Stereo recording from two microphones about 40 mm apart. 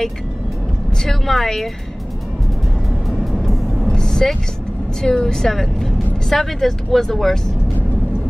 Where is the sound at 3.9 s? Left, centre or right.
Centre.